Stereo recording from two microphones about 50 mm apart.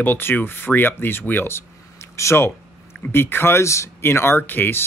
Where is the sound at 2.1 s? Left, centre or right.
Left.